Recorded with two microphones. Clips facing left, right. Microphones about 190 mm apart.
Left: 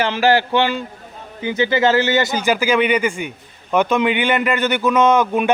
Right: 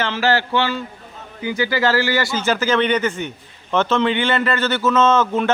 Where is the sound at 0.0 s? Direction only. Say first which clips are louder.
Left 3 dB; 15° left (ahead or behind).